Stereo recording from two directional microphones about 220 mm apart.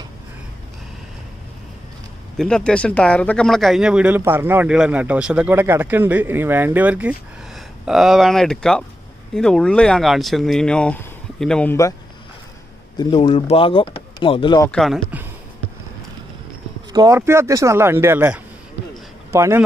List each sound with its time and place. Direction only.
2.3 s speech: 5° left (ahead or behind)
12.9 s speech: 20° left (ahead or behind)
14.7 s speech: centre (ahead or behind)
16.9 s speech: 15° right (ahead or behind)